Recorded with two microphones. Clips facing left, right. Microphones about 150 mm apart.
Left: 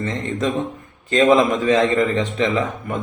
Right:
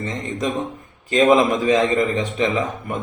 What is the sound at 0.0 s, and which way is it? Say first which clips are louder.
Speech: left 2 dB; 15° right (ahead or behind).